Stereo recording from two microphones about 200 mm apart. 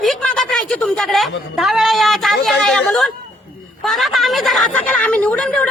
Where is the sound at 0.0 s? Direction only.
Centre (ahead or behind).